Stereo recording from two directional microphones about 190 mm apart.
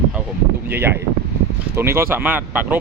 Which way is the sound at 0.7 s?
10° right (ahead or behind).